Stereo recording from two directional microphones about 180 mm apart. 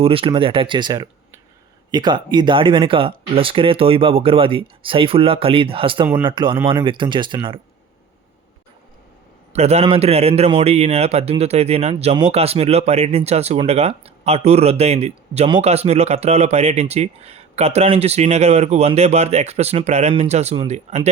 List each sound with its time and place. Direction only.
0.0 s speech: 30° right (ahead or behind)
9.5 s a man's voice: 35° right (ahead or behind)